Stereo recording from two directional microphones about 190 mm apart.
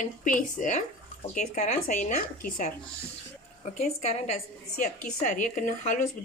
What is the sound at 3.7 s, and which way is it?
A woman's voice, 35° left (ahead or behind).